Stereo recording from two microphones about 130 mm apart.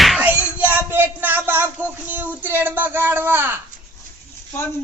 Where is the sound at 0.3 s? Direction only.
10° right (ahead or behind).